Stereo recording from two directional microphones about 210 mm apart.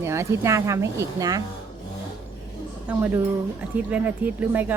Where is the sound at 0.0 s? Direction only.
15° right (ahead or behind).